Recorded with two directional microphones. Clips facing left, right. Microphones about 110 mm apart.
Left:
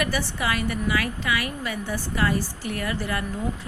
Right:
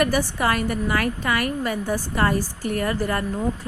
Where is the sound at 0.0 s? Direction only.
45° right (ahead or behind).